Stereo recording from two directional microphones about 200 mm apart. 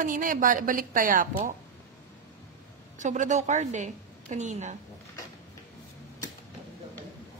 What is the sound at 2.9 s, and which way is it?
A woman's voice, 35° right (ahead or behind).